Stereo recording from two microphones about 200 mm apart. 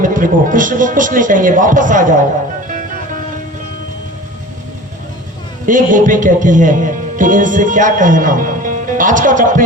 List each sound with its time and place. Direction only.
0.0 s a man's voice: 40° right (ahead or behind)
5.6 s a man's voice: 40° right (ahead or behind)